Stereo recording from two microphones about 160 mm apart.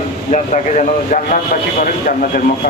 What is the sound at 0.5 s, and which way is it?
Speech, 50° left (ahead or behind).